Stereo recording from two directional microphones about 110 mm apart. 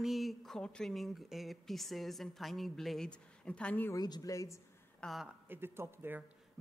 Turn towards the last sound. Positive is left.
turn(degrees=-20)  # may be behind; listen again after turning